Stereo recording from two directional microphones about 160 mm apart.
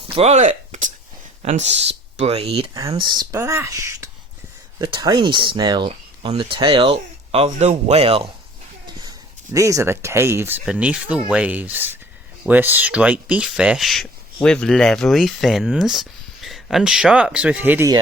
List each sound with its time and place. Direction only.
0.1 s speech: 40° right (ahead or behind)
2.7 s speech: 20° right (ahead or behind); by 8.3 s 40° right (ahead or behind)
9.0 s speech: 20° right (ahead or behind)